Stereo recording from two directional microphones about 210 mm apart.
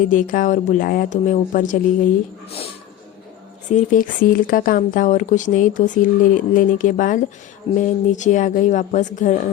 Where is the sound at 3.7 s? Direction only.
35° left (ahead or behind).